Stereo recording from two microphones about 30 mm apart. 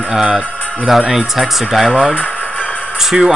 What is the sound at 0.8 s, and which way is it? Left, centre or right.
Speech, centre.